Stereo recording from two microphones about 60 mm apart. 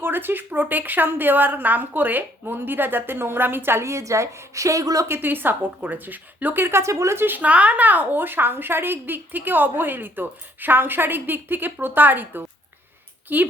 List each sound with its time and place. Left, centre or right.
0.0 s a woman's voice: right
3.8 s a woman's voice: right
5.0 s a woman's voice: right
7.3 s a woman's voice: right